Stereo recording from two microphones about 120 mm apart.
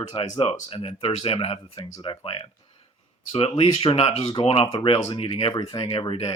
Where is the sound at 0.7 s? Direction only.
50° left (ahead or behind).